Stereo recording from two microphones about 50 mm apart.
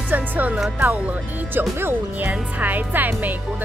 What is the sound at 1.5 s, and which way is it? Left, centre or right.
Speech, right.